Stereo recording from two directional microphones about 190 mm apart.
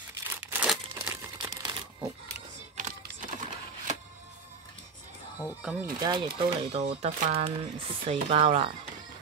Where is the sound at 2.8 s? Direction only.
40° right (ahead or behind).